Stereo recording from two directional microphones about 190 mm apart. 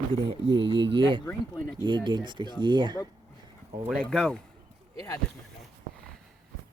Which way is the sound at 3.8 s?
Centre (ahead or behind).